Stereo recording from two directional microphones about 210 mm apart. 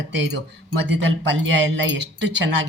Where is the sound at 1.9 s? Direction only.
55° right (ahead or behind).